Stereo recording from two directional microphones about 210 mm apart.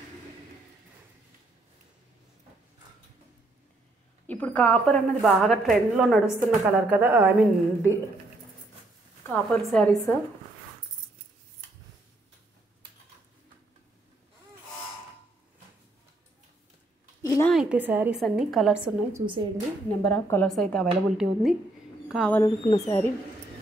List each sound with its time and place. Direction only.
4.3 s a woman's voice: 5° left (ahead or behind); by 7.3 s 10° right (ahead or behind)
9.3 s a woman's voice: centre (ahead or behind)
17.2 s a sound: 15° left (ahead or behind)
17.5 s a woman's voice: 5° right (ahead or behind)
19.1 s a woman's voice: 25° right (ahead or behind)
20.1 s a woman's voice: 5° left (ahead or behind)
22.4 s speech: 15° left (ahead or behind)